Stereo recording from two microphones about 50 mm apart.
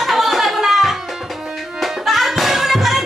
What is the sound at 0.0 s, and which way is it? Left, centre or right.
Music, centre.